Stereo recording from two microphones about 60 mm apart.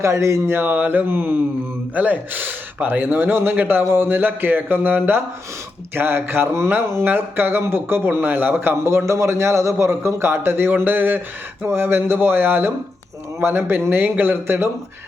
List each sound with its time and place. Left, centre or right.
0.0 s speech: right
8.8 s a man's voice: right